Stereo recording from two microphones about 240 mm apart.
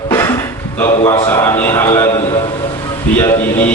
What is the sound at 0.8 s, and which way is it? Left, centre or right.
A man's voice, centre.